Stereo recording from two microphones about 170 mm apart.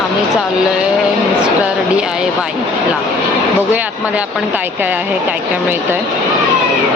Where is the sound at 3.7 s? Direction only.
10° right (ahead or behind).